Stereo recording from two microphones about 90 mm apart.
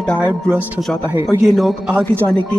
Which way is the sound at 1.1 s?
30° right (ahead or behind).